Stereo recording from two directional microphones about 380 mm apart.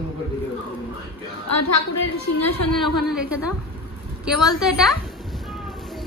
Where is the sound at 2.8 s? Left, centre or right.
Centre.